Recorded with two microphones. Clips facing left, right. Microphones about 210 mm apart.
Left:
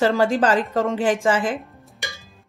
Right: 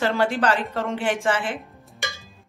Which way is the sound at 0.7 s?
35° left (ahead or behind).